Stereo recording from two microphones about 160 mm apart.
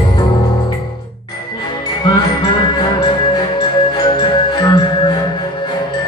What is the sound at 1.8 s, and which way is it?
Music, 25° left (ahead or behind).